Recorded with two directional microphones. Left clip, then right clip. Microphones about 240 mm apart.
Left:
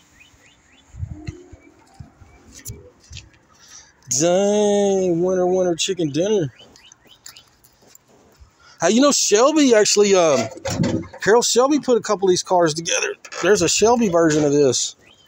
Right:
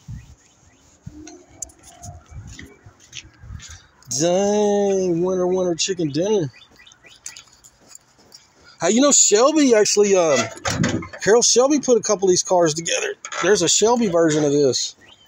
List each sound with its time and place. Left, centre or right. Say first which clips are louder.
4.1 s speech: left 1 dB; centre
5.1 s speech: left 2 dB; centre
6.1 s speech: even; centre
8.7 s speech: even; centre